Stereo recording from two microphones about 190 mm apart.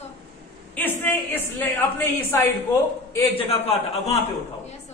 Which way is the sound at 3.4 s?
30° left (ahead or behind).